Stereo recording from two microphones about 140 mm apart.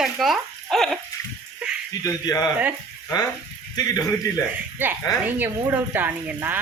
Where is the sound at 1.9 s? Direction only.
25° left (ahead or behind).